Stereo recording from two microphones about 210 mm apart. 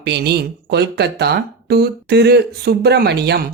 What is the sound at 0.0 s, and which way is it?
Speech, 50° right (ahead or behind).